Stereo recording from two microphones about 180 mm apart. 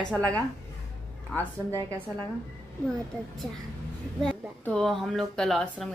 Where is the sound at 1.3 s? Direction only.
15° right (ahead or behind).